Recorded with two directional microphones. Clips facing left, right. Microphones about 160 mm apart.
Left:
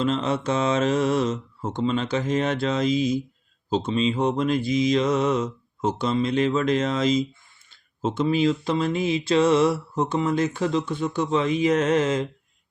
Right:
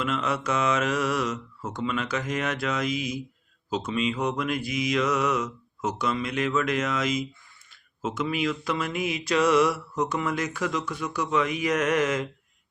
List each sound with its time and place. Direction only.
0.0 s speech: 30° left (ahead or behind)